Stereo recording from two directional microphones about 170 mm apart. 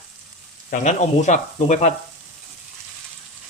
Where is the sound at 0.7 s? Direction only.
45° left (ahead or behind).